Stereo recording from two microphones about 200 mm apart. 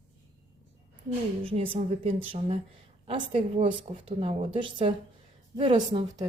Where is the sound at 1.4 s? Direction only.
30° right (ahead or behind).